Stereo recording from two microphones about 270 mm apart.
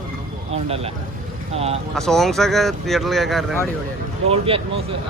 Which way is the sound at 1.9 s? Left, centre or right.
Centre.